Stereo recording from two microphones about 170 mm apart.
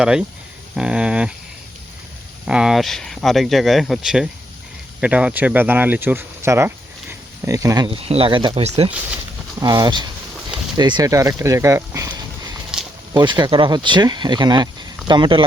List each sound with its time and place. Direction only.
0.0 s speech: 5° right (ahead or behind)
2.5 s speech: 5° right (ahead or behind); by 7.9 s 20° right (ahead or behind)
7.9 s speech: 35° right (ahead or behind)
9.6 s speech: 20° right (ahead or behind)